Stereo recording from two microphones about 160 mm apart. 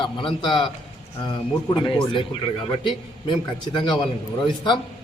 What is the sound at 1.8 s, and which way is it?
Speech, 30° left (ahead or behind).